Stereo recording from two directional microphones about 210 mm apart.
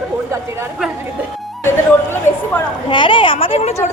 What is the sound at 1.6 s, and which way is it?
Speech, 10° left (ahead or behind).